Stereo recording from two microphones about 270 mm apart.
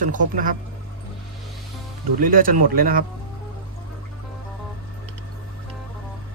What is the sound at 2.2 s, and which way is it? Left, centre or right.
Speech, right.